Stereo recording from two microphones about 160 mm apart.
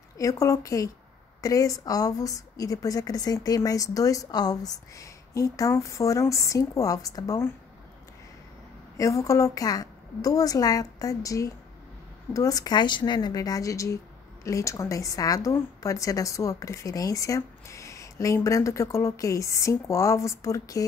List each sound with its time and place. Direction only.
0.2 s a woman's voice: 20° left (ahead or behind)
8.9 s a woman's voice: 20° left (ahead or behind)